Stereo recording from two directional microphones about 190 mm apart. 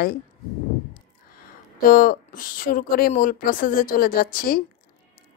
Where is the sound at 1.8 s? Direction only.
45° left (ahead or behind).